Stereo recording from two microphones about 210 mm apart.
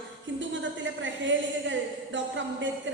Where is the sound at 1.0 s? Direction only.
60° right (ahead or behind).